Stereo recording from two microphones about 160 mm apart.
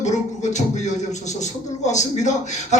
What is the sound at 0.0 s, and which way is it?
Speech, 50° left (ahead or behind).